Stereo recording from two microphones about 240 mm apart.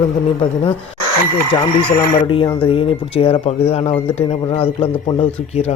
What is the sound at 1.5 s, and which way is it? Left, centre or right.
A man's voice, left.